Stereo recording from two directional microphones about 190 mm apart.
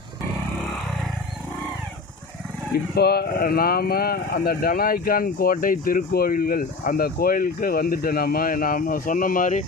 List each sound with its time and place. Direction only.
2.9 s speech: 55° left (ahead or behind)